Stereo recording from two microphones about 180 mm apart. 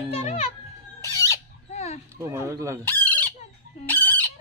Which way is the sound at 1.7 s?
35° left (ahead or behind).